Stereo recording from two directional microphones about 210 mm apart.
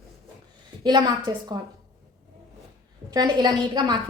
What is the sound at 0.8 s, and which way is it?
Speech, 20° right (ahead or behind).